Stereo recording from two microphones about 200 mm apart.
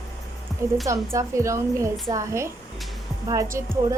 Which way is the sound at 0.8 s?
15° right (ahead or behind).